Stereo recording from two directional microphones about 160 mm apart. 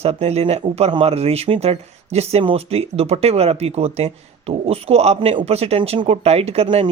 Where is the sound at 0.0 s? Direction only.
40° right (ahead or behind).